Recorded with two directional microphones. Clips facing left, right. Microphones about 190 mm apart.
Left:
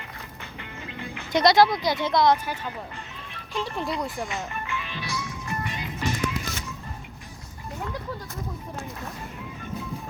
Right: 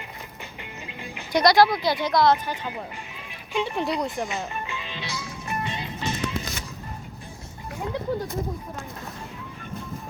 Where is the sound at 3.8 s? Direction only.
20° right (ahead or behind).